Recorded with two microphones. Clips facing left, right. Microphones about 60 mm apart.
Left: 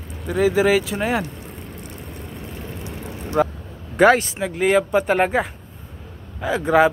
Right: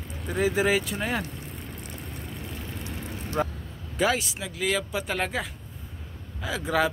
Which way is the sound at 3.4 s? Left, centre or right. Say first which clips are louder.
Left 9 dB; left.